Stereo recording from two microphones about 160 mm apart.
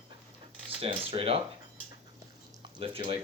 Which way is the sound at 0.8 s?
35° right (ahead or behind).